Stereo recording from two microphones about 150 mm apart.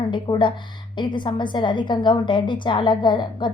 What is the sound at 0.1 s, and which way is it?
A woman's voice, 30° left (ahead or behind).